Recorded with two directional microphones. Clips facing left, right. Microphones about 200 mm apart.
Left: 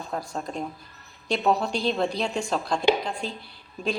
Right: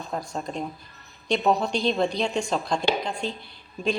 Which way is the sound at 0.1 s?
Centre (ahead or behind).